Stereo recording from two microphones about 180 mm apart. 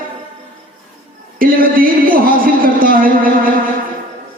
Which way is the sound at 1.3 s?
50° right (ahead or behind).